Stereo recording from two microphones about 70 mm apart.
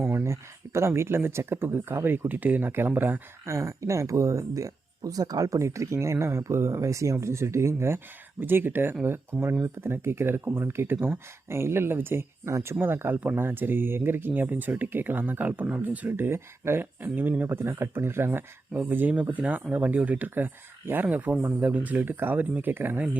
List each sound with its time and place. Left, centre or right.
0.1 s speech: right
3.4 s speech: right
12.8 s speech: right